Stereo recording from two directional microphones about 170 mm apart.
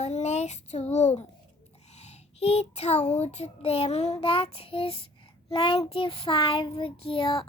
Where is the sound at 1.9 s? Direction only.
40° left (ahead or behind).